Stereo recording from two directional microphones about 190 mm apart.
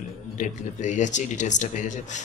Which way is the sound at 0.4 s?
40° left (ahead or behind).